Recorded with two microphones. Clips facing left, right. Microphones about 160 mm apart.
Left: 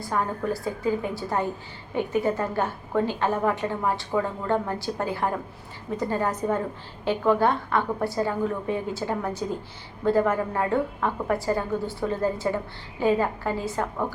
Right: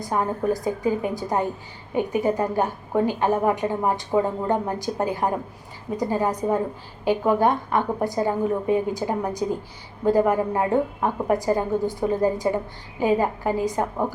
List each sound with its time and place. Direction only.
0.0 s a woman's voice: 20° right (ahead or behind)